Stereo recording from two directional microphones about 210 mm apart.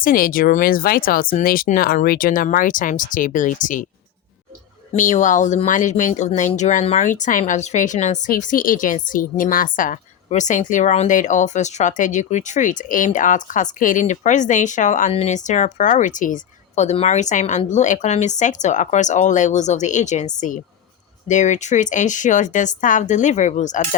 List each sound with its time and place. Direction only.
0.0 s speech: 40° left (ahead or behind)
4.9 s speech: 35° left (ahead or behind)
21.2 s speech: 35° left (ahead or behind)